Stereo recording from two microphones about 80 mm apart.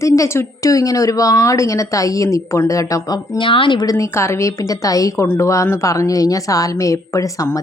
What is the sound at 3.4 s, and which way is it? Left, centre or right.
Speech, left.